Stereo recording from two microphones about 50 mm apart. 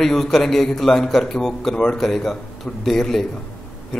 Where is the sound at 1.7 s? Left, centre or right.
Centre.